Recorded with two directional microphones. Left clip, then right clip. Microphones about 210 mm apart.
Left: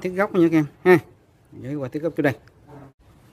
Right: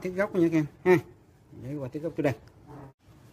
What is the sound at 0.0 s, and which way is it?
Speech, 40° left (ahead or behind).